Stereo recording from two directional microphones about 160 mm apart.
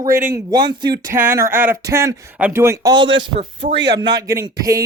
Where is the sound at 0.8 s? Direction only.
30° right (ahead or behind).